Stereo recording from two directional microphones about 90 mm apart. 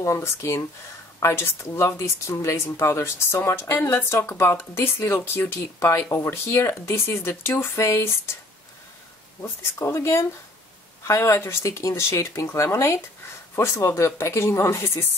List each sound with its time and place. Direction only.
0.0 s speech: 30° left (ahead or behind)
9.4 s speech: 30° left (ahead or behind)